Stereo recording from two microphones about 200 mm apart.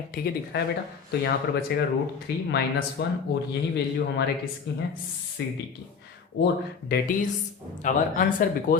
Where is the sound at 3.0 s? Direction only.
50° left (ahead or behind).